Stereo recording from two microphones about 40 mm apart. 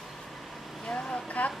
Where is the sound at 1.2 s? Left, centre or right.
Left.